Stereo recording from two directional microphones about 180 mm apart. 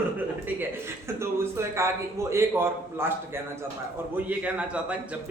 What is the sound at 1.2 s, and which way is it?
A man's voice, 15° right (ahead or behind).